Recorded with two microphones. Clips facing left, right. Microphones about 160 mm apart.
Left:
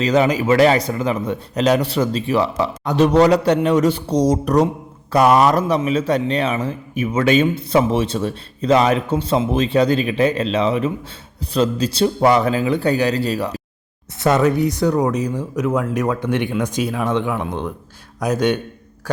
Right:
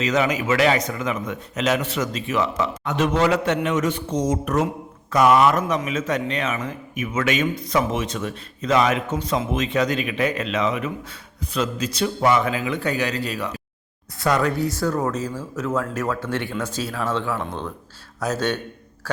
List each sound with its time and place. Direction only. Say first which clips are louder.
0.0 s a man's voice: left 5 dB; 35° left (ahead or behind); by 19.2 s 15° left (ahead or behind)